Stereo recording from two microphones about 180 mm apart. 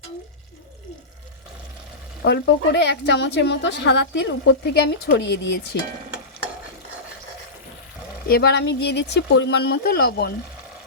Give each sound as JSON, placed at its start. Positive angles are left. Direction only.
{"t": 2.2, "sound": "a woman's voice", "side_deg": 70}
{"t": 8.3, "sound": "speech", "side_deg": 65}